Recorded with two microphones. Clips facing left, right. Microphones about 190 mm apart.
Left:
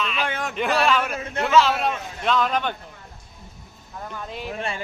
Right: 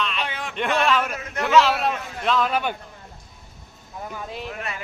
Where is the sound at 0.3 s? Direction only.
50° left (ahead or behind).